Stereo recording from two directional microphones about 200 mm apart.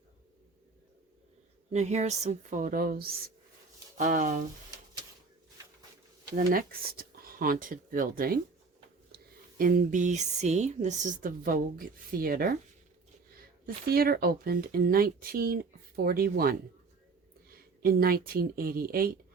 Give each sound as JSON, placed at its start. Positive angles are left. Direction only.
{"t": 1.7, "sound": "speech", "side_deg": -35}
{"t": 6.3, "sound": "speech", "side_deg": -45}
{"t": 9.6, "sound": "speech", "side_deg": -45}
{"t": 13.7, "sound": "speech", "side_deg": -50}